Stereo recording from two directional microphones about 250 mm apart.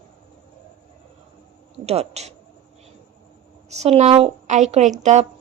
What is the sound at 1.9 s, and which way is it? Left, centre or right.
Speech, right.